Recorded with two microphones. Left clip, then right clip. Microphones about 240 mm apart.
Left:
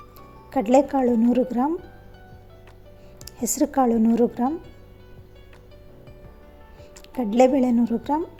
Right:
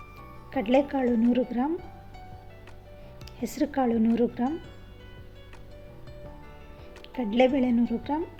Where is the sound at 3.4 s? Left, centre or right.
Centre.